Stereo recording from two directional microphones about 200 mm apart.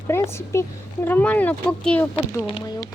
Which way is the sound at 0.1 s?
15° left (ahead or behind).